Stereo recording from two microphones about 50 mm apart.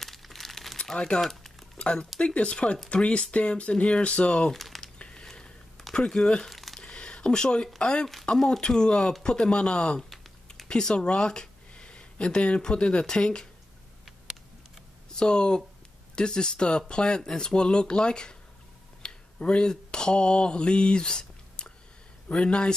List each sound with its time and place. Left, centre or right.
0.0 s crumpling: centre
0.9 s speech: centre
1.2 s a sound: centre
1.8 s speech: centre
4.5 s a sound: centre
4.9 s a sound: centre
6.5 s crumpling: centre
6.8 s a sound: centre
7.8 s speech: centre
10.0 s typing: centre
10.7 s speech: centre
15.1 s speech: centre
19.0 s mantra: centre
22.3 s speech: centre